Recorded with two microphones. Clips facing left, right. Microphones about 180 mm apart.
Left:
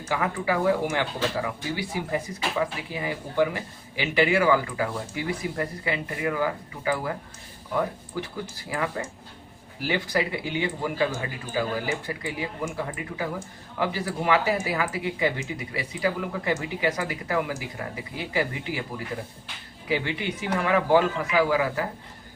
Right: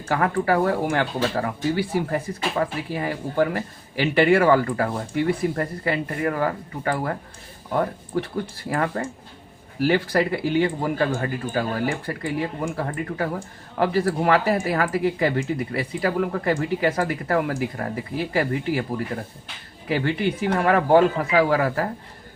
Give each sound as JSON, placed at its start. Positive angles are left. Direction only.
{"t": 0.0, "sound": "speech", "side_deg": -55}